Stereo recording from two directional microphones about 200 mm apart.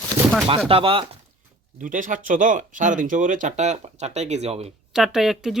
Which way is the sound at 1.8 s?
40° right (ahead or behind).